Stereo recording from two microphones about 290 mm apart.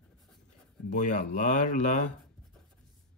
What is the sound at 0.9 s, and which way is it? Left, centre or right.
Speech, left.